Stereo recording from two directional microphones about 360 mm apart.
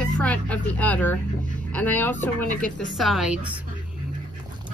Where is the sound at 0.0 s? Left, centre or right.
Centre.